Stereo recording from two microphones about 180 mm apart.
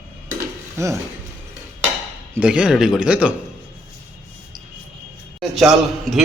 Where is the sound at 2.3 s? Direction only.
5° right (ahead or behind).